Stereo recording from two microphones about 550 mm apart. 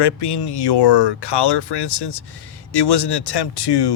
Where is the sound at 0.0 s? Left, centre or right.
Left.